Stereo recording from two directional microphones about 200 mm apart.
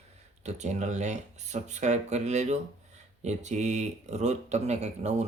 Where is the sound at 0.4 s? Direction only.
35° right (ahead or behind).